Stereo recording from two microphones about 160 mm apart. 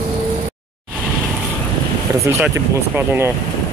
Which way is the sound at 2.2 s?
15° right (ahead or behind).